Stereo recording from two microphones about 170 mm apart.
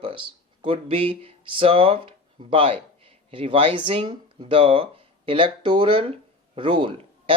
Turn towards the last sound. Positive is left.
turn(degrees=-30)  # may be behind; listen again after turning